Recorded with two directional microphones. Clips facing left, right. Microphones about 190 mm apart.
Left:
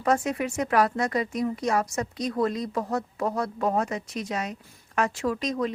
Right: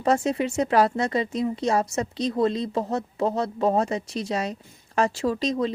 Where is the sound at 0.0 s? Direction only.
30° right (ahead or behind).